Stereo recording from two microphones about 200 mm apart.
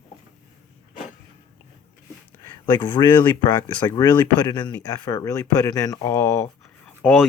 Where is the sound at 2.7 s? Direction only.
25° left (ahead or behind).